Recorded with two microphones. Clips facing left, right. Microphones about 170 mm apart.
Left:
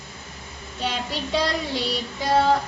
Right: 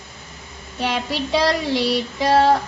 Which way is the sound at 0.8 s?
80° right.